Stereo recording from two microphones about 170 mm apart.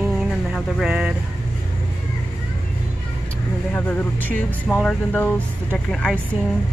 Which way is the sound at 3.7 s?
10° left (ahead or behind).